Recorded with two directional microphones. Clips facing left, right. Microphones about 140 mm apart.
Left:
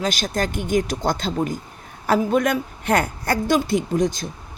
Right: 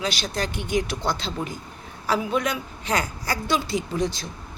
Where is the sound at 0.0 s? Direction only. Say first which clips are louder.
Left 4 dB; 45° left (ahead or behind).